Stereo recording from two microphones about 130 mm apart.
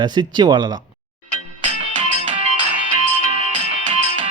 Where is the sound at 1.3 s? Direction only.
70° right (ahead or behind).